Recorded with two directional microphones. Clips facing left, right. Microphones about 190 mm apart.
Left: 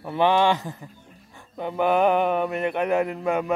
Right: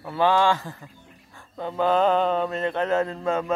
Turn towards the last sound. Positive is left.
turn(degrees=15)  # may be behind; listen again after turning